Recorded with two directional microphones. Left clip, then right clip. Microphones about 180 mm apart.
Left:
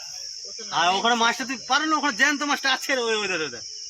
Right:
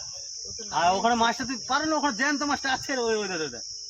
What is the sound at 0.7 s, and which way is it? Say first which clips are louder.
Speech: left 2 dB; 40° right (ahead or behind).